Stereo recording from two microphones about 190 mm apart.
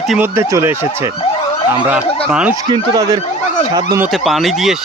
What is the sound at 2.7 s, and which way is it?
Speech, 20° right (ahead or behind).